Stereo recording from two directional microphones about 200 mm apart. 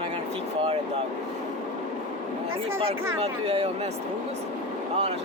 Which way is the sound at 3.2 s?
30° right (ahead or behind).